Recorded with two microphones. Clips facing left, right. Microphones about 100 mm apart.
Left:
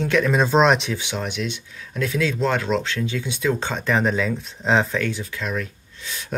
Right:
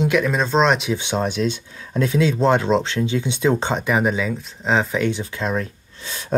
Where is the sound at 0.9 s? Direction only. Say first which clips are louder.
Right 5 dB; 30° right (ahead or behind).